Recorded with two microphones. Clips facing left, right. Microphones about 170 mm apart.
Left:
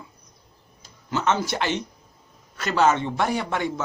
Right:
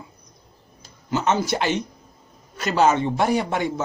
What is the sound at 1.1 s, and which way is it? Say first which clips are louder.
A man's voice: right 2 dB; 15° right (ahead or behind).